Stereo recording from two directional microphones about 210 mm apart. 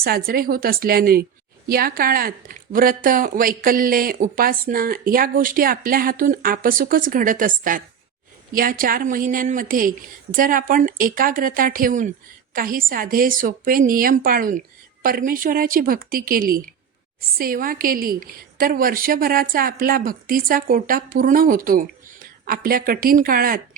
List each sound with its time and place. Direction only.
0.0 s a woman's voice: 45° right (ahead or behind)